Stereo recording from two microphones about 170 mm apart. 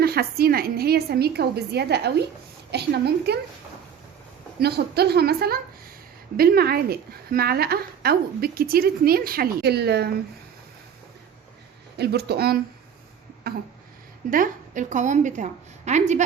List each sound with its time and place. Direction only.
0.0 s a woman's voice: 65° right (ahead or behind)
4.6 s a woman's voice: 70° right (ahead or behind)
11.9 s a woman's voice: 70° right (ahead or behind)
14.3 s a woman's voice: 55° right (ahead or behind)